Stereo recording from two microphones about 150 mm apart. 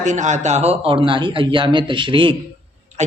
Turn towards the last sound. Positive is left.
turn(degrees=-50)  # may be behind; listen again after turning